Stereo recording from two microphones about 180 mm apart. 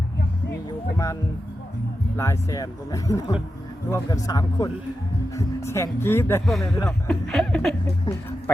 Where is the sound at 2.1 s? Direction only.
15° left (ahead or behind).